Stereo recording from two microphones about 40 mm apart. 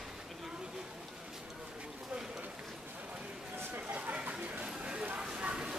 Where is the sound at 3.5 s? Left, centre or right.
Right.